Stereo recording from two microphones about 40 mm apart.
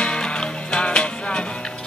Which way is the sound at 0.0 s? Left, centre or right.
Left.